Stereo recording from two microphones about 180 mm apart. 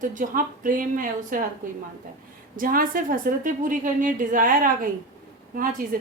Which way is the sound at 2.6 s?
50° right (ahead or behind).